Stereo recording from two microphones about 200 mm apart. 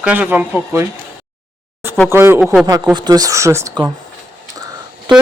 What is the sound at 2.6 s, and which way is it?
Speech, 20° right (ahead or behind).